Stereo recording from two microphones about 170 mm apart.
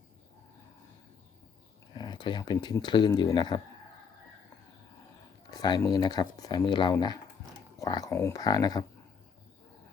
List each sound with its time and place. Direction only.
1.9 s speech: 25° left (ahead or behind)
5.5 s speech: 25° left (ahead or behind)